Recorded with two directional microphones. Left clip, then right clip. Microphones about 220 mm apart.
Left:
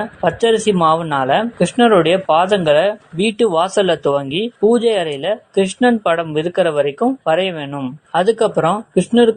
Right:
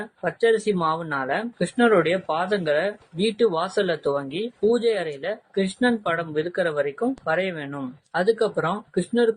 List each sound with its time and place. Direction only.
0.2 s speech: 25° left (ahead or behind)